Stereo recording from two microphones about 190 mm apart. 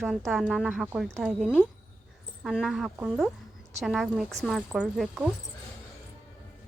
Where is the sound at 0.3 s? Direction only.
Centre (ahead or behind).